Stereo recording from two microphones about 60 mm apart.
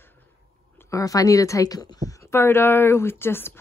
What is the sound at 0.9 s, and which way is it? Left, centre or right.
Speech, left.